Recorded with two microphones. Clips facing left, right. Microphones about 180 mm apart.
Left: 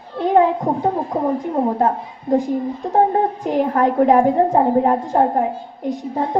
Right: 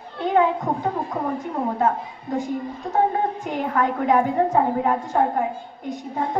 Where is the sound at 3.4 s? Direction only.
35° left (ahead or behind).